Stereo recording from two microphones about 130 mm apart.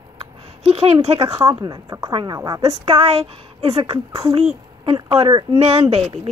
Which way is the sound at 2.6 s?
50° right (ahead or behind).